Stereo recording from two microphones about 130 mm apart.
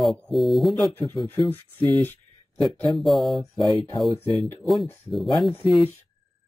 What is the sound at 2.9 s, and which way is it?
Speech, centre (ahead or behind).